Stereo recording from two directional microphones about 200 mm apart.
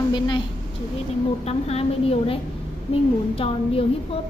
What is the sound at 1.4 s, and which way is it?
A woman's voice, 30° left (ahead or behind).